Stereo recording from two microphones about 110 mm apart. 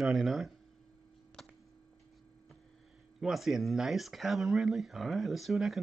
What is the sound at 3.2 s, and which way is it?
Speech, centre (ahead or behind).